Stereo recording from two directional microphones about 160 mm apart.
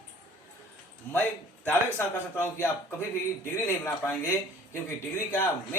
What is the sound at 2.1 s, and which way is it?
A man's voice, 15° left (ahead or behind).